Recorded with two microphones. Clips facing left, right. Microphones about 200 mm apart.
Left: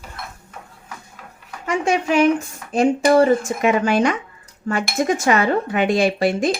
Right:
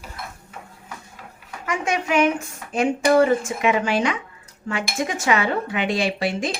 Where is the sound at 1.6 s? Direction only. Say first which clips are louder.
Left 5 dB; 30° left (ahead or behind).